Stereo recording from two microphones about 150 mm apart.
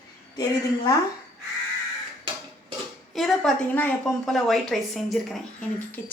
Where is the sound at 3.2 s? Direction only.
Centre (ahead or behind).